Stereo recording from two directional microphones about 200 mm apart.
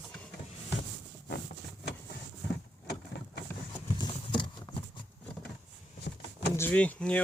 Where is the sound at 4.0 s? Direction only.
25° left (ahead or behind).